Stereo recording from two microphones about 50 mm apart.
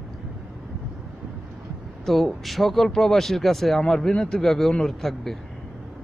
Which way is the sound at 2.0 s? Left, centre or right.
Centre.